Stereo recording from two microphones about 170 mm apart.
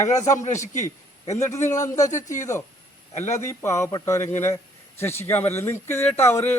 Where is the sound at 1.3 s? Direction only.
15° left (ahead or behind).